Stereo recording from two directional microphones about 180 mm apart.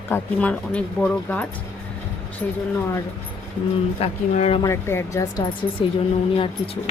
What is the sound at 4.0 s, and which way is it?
Speech, 35° left (ahead or behind).